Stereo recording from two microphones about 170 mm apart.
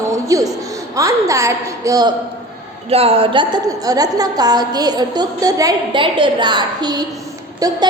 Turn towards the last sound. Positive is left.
turn(degrees=-20)  # may be behind; listen again after turning